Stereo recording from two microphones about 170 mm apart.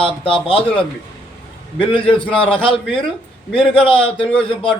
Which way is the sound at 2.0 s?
10° left (ahead or behind).